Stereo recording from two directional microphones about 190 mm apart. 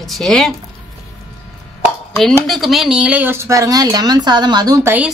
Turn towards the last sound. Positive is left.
turn(degrees=-20)  # may be behind; listen again after turning